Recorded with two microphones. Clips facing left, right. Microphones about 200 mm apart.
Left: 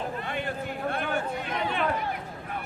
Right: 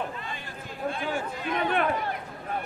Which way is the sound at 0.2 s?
65° left (ahead or behind).